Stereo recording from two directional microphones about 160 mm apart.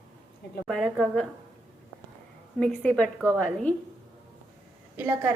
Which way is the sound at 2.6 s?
5° left (ahead or behind).